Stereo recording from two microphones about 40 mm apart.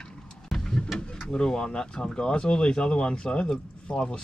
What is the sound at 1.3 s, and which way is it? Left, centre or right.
Speech, left.